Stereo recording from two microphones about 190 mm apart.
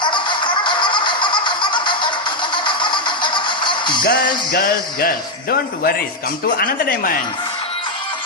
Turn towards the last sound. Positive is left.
turn(degrees=50)  # may be behind; listen again after turning